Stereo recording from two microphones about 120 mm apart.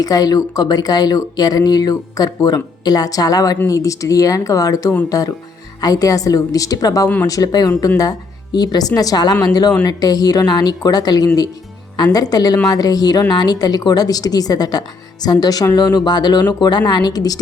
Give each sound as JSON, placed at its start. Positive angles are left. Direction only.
{"t": 0.0, "sound": "speech", "side_deg": 30}